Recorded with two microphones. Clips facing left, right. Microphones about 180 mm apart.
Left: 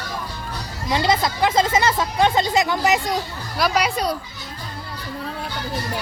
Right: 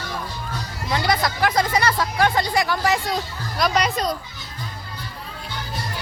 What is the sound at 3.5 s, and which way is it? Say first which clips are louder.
Speech: even; 5° left (ahead or behind).